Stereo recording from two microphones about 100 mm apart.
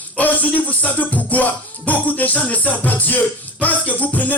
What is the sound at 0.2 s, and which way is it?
Music, 15° left (ahead or behind).